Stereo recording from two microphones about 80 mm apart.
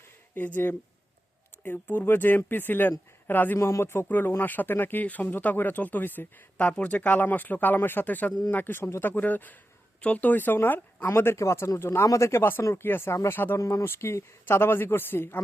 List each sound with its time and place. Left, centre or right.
0.3 s speech: left
3.6 s speech: left
13.6 s speech: left